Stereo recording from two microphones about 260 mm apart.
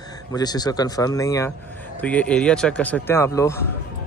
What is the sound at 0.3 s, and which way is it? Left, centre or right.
Speech, centre.